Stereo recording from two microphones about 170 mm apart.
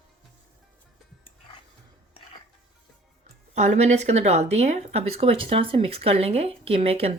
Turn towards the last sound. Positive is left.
turn(degrees=-35)  # may be behind; listen again after turning